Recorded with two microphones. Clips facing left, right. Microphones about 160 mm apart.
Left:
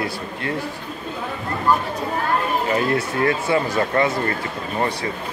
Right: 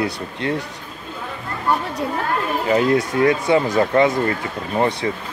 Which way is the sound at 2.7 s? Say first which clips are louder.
Right 8 dB; 20° right (ahead or behind).